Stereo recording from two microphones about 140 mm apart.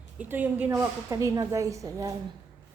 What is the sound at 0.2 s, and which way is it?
Speech, 15° right (ahead or behind).